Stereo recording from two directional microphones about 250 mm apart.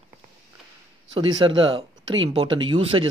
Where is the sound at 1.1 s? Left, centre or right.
Centre.